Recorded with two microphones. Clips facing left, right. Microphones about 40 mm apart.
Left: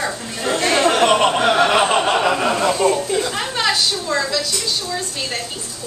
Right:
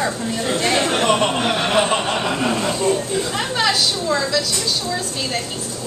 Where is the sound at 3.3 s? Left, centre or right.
Centre.